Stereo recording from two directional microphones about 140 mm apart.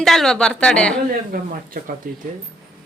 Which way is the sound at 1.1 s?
90° right.